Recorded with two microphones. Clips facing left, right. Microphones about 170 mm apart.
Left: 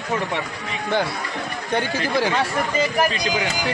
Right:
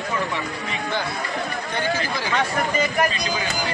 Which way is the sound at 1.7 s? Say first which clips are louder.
Left 5 dB; 65° left (ahead or behind).